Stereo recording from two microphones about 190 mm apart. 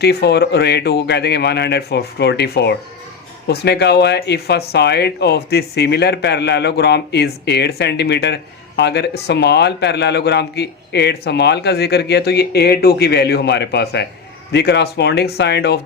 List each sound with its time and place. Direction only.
0.0 s speech: 60° left (ahead or behind)